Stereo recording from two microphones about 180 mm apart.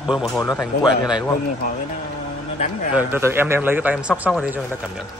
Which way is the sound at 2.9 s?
10° right (ahead or behind).